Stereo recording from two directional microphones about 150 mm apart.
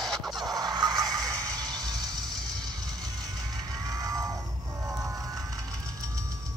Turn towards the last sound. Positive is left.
turn(degrees=-20)  # may be behind; listen again after turning